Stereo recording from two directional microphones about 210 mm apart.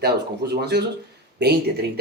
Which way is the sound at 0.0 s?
50° right (ahead or behind).